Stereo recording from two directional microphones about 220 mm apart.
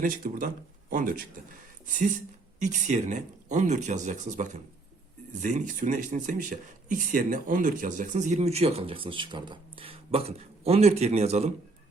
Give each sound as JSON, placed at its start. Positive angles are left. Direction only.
{"t": 0.0, "sound": "speech", "side_deg": -40}
{"t": 2.6, "sound": "speech", "side_deg": -35}